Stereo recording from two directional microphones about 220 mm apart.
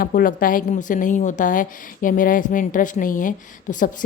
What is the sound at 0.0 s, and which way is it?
A woman's voice, 40° left (ahead or behind).